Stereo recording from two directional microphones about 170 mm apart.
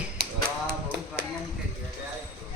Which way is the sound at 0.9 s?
90° right.